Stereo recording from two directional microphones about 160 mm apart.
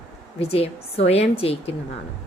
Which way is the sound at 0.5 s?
40° left (ahead or behind).